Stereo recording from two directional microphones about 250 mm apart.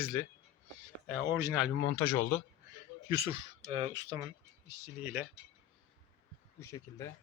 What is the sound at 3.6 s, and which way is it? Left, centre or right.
Speech, right.